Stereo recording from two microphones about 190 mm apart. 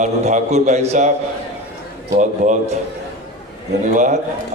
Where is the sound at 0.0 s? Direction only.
40° right (ahead or behind).